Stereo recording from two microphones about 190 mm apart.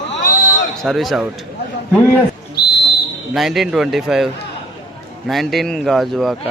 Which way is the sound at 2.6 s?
55° left (ahead or behind).